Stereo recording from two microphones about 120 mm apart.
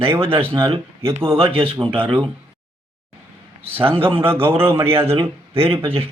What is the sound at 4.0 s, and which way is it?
A man's voice, 50° right (ahead or behind).